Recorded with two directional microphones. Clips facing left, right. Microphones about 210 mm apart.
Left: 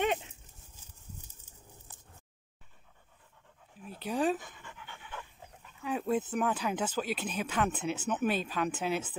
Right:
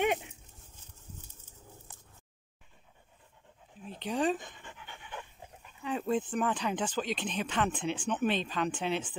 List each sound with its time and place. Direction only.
3.8 s speech: 5° left (ahead or behind)
4.6 s pant: 20° right (ahead or behind)
5.9 s speech: 5° left (ahead or behind)